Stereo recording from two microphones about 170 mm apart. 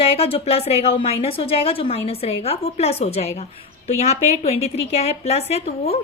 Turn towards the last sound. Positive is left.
turn(degrees=35)  # may be behind; listen again after turning